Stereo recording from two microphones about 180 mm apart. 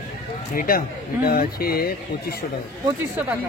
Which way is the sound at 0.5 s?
50° left (ahead or behind).